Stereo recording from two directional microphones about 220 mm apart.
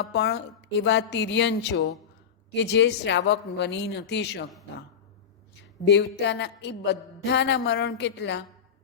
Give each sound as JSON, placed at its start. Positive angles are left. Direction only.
{"t": 0.0, "sound": "a woman's voice", "side_deg": 50}
{"t": 6.1, "sound": "a woman's voice", "side_deg": 50}